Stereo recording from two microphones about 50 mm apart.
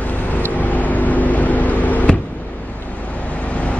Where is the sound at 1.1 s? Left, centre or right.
Left.